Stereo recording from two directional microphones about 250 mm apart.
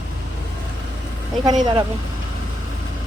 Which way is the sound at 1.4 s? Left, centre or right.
Centre.